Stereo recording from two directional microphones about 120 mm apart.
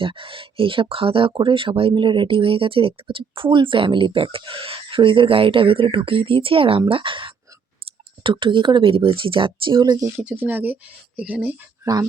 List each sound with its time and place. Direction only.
0.0 s speech: 45° right (ahead or behind)
10.2 s speech: 15° right (ahead or behind)